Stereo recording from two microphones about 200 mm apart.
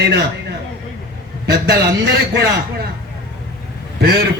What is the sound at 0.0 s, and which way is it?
Speech, 55° right (ahead or behind).